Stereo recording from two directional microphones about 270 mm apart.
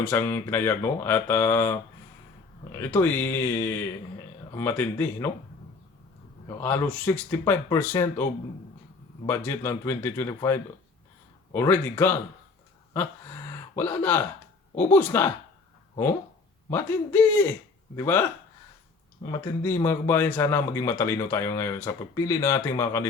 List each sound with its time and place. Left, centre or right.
0.0 s speech: centre
2.9 s speech: centre
6.6 s speech: centre
9.2 s speech: centre
12.9 s a sound: centre
14.9 s speech: centre
16.6 s speech: centre